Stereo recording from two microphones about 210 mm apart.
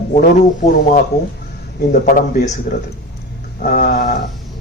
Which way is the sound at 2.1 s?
40° left (ahead or behind).